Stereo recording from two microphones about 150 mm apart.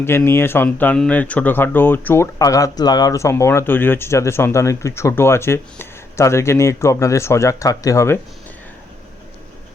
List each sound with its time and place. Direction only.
0.3 s speech: 15° left (ahead or behind)